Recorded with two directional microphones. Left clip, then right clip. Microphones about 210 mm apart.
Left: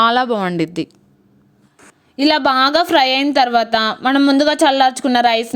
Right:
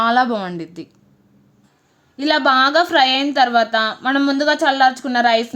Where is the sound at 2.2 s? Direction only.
35° left (ahead or behind).